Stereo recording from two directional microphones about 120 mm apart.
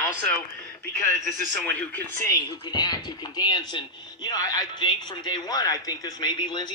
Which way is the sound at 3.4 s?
35° left (ahead or behind).